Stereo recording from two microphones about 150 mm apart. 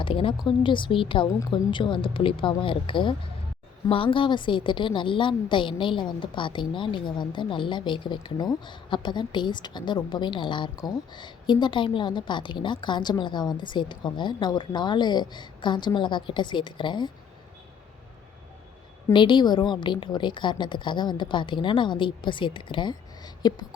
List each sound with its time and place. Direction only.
0.0 s a woman's voice: 35° left (ahead or behind)
19.1 s a woman's voice: 30° left (ahead or behind)